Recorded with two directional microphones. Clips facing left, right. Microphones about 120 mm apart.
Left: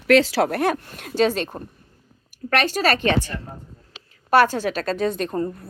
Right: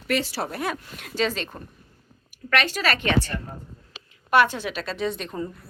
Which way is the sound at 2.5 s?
40° left (ahead or behind).